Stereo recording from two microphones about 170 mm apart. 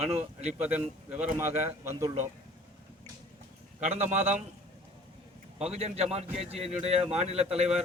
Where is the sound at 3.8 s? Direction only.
45° right (ahead or behind).